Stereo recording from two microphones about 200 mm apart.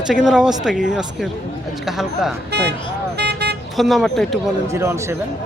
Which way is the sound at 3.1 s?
55° right (ahead or behind).